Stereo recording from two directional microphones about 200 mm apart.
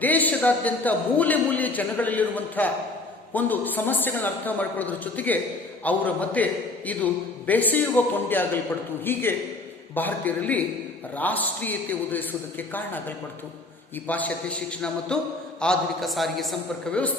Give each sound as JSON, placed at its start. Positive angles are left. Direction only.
{"t": 0.0, "sound": "a man's voice", "side_deg": 10}